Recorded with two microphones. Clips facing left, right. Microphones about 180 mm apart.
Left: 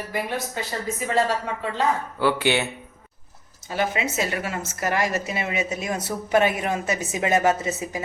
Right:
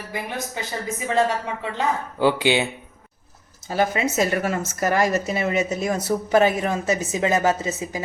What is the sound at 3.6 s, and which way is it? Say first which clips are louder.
A woman's voice: right 3 dB; 40° right (ahead or behind).